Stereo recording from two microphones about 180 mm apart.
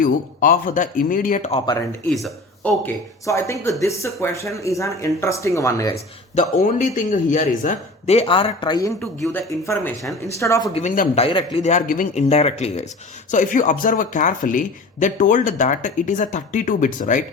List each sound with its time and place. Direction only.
0.0 s speech: 50° left (ahead or behind)
1.5 s a man's voice: 25° left (ahead or behind)
2.0 s speech: centre (ahead or behind)
2.8 s speech: 15° left (ahead or behind)
6.6 s speech: 45° left (ahead or behind); by 8.9 s 25° left (ahead or behind)
9.2 s speech: 15° left (ahead or behind)
10.8 s speech: 45° left (ahead or behind)
11.2 s a man's voice: 30° left (ahead or behind)
11.6 s speech: 45° left (ahead or behind)